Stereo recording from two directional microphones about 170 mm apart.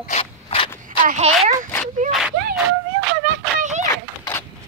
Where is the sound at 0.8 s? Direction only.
45° right (ahead or behind).